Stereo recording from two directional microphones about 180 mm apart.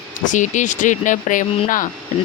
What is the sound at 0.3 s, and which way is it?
Speech, 45° left (ahead or behind).